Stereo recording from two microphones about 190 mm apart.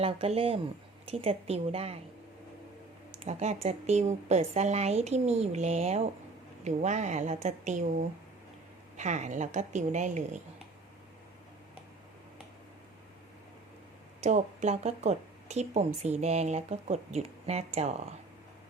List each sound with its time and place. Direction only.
0.0 s speech: 30° right (ahead or behind)
3.1 s speech: 35° right (ahead or behind)
14.2 s speech: 35° right (ahead or behind)